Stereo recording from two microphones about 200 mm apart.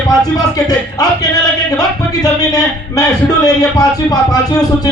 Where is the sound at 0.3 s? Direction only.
20° left (ahead or behind).